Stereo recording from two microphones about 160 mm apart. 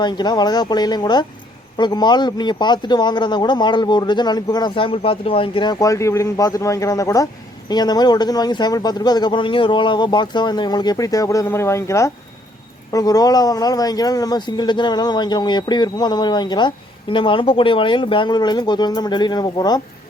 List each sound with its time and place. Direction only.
0.0 s speech: 25° left (ahead or behind)